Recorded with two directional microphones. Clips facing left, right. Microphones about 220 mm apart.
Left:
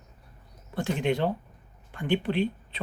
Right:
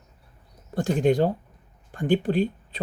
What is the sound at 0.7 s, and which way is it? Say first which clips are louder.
Speech: right 6 dB; 40° right (ahead or behind).